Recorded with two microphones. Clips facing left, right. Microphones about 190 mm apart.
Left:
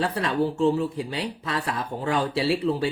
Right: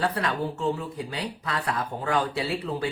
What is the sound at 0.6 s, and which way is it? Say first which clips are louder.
Speech: left 6 dB; 30° left (ahead or behind).